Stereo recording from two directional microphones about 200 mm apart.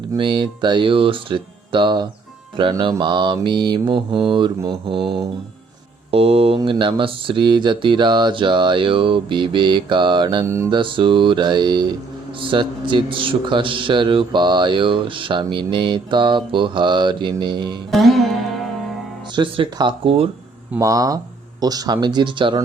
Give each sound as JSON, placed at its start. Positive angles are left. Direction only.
{"t": 0.2, "sound": "a man's voice", "side_deg": -25}
{"t": 6.1, "sound": "a man's voice", "side_deg": -30}
{"t": 10.8, "sound": "a man's voice", "side_deg": -25}
{"t": 17.9, "sound": "music", "side_deg": 0}
{"t": 19.4, "sound": "a man's voice", "side_deg": -25}
{"t": 20.7, "sound": "a man's voice", "side_deg": -15}